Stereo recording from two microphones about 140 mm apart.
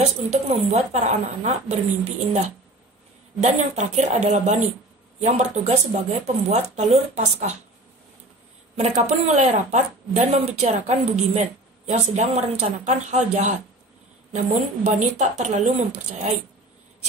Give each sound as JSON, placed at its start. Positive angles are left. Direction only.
{"t": 0.0, "sound": "a woman's voice", "side_deg": -50}
{"t": 8.7, "sound": "a woman's voice", "side_deg": -50}